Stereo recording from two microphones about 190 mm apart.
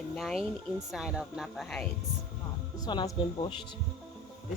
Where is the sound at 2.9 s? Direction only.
25° left (ahead or behind).